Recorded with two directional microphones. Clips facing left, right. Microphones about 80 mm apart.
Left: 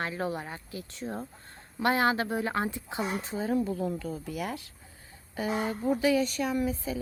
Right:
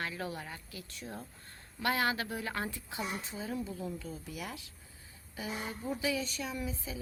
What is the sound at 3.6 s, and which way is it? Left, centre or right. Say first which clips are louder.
Speech: left 8 dB; left.